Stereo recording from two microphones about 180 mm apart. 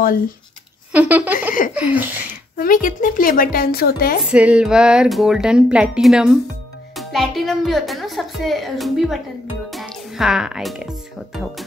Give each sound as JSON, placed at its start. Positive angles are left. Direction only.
{"t": 0.9, "sound": "speech", "side_deg": -10}
{"t": 2.5, "sound": "a woman's voice", "side_deg": 50}
{"t": 4.2, "sound": "speech", "side_deg": -5}